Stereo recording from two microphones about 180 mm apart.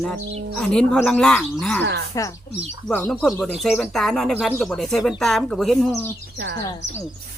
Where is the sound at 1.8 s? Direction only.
65° right (ahead or behind).